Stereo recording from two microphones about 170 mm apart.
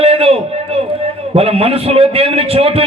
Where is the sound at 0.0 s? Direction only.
35° right (ahead or behind).